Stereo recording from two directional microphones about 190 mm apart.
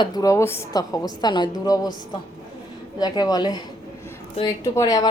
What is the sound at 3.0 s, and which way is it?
Speech, 20° left (ahead or behind).